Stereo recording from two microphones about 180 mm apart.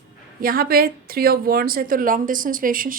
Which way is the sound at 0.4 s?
55° right (ahead or behind).